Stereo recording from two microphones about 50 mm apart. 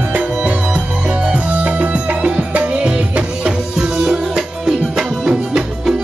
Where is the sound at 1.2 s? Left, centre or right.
Right.